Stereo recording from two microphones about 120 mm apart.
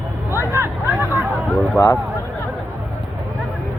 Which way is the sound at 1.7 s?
25° left (ahead or behind).